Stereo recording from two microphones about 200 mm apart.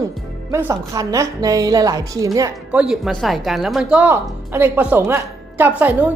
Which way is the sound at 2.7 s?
5° right (ahead or behind).